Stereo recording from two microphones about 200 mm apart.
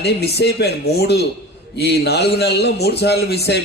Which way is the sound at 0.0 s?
55° left (ahead or behind).